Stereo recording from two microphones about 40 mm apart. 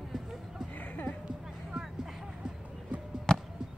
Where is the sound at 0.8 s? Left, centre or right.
Left.